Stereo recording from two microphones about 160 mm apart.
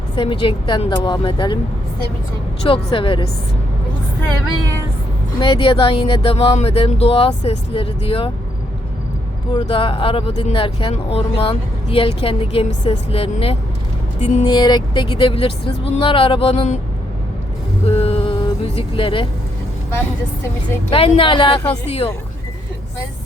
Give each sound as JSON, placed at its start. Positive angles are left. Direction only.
{"t": 0.2, "sound": "speech", "side_deg": 30}
{"t": 2.6, "sound": "speech", "side_deg": 35}
{"t": 5.4, "sound": "speech", "side_deg": 35}
{"t": 9.5, "sound": "speech", "side_deg": 30}
{"t": 14.4, "sound": "speech", "side_deg": 25}
{"t": 17.8, "sound": "speech", "side_deg": 40}
{"t": 20.9, "sound": "speech", "side_deg": 35}